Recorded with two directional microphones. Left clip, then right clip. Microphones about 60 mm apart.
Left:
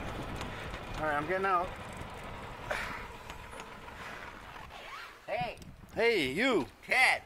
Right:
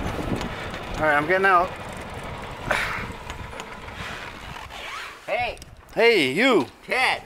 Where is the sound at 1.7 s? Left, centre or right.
Centre.